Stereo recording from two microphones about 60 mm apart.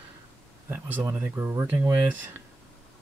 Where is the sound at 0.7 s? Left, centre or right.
Right.